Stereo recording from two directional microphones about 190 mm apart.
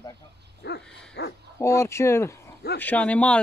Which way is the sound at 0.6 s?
65° left (ahead or behind).